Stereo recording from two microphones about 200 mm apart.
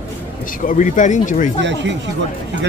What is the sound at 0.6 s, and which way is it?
Speech, 40° left (ahead or behind).